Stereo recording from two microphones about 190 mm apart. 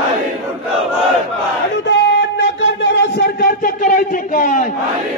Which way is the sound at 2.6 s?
65° left (ahead or behind).